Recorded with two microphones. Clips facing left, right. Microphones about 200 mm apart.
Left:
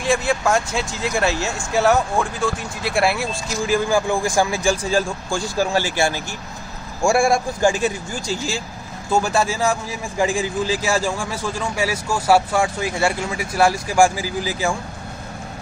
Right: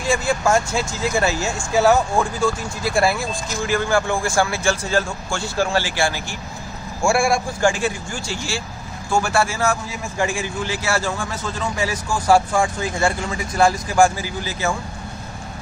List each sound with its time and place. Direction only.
0.1 s a man's voice: centre (ahead or behind); by 7.3 s 20° left (ahead or behind)
9.1 s speech: 15° left (ahead or behind)